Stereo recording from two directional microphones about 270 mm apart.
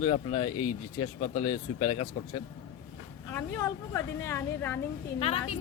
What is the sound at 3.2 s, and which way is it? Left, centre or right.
A woman's voice, centre.